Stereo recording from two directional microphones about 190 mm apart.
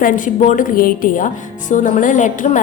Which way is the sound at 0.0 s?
45° left (ahead or behind).